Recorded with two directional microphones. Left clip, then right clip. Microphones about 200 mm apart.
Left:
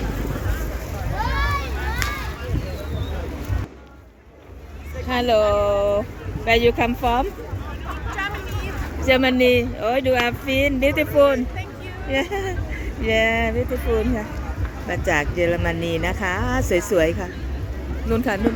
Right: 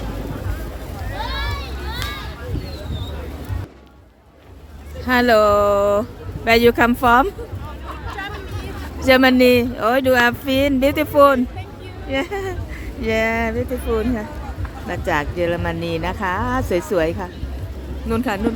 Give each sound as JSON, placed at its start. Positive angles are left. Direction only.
{"t": 1.2, "sound": "vehicle", "side_deg": -55}
{"t": 5.0, "sound": "speech", "side_deg": -35}
{"t": 9.0, "sound": "speech", "side_deg": -30}
{"t": 12.0, "sound": "speech", "side_deg": -10}